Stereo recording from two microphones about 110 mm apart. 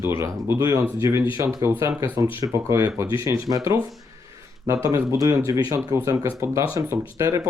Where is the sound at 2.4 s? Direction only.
30° right (ahead or behind).